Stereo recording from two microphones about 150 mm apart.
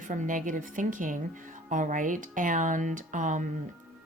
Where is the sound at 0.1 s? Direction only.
60° right (ahead or behind).